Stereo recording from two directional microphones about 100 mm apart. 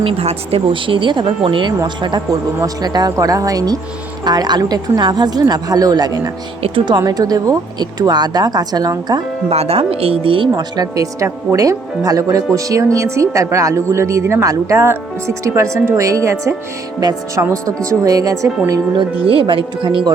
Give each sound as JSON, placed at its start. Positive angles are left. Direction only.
{"t": 0.0, "sound": "speech", "side_deg": -75}
{"t": 9.5, "sound": "speech", "side_deg": -90}
{"t": 10.5, "sound": "speech", "side_deg": -40}
{"t": 17.0, "sound": "speech", "side_deg": -40}
{"t": 19.2, "sound": "speech", "side_deg": -65}